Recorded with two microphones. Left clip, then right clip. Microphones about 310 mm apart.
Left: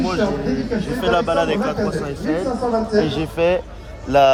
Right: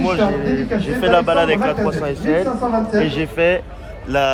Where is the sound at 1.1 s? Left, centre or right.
Centre.